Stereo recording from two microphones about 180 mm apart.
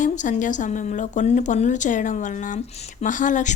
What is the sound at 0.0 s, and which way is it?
A woman's voice, 45° left (ahead or behind).